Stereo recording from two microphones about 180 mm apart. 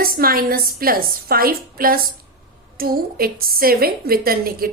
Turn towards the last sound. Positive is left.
turn(degrees=-55)  # may be behind; listen again after turning